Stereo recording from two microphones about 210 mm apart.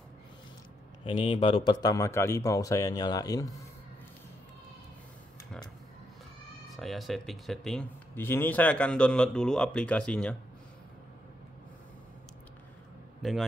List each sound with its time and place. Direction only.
1.0 s a man's voice: 25° left (ahead or behind)
6.7 s speech: centre (ahead or behind)
13.2 s a man's voice: centre (ahead or behind)